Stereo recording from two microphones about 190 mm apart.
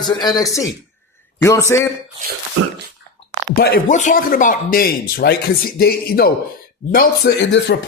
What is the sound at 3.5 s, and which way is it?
Speech, 50° left (ahead or behind).